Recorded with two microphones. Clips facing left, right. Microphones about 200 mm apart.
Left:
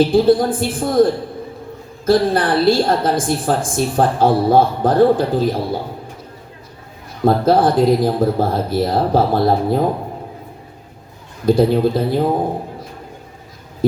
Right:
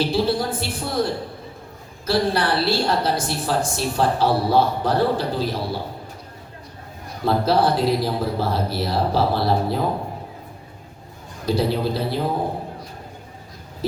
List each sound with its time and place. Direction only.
0.0 s a woman's voice: 50° left (ahead or behind)
7.3 s a woman's voice: 50° left (ahead or behind)
11.4 s a woman's voice: 50° left (ahead or behind)